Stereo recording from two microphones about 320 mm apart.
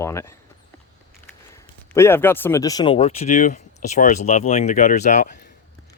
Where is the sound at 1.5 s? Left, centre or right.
Centre.